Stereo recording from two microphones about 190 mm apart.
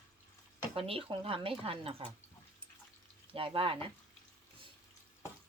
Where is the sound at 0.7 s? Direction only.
30° right (ahead or behind).